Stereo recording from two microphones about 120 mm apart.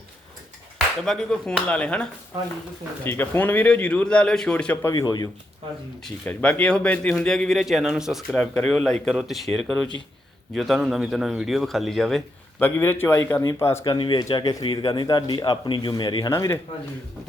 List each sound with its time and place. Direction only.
1.0 s speech: 5° left (ahead or behind)
4.9 s speech: 35° left (ahead or behind)
6.2 s a man's voice: 10° left (ahead or behind)
12.5 s a man's voice: 20° left (ahead or behind)
13.8 s speech: 40° left (ahead or behind)
14.6 s speech: 45° left (ahead or behind)
14.8 s speech: 35° left (ahead or behind)
16.3 s a man's voice: 20° left (ahead or behind)